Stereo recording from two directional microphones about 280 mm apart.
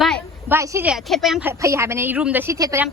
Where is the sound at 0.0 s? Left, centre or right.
Centre.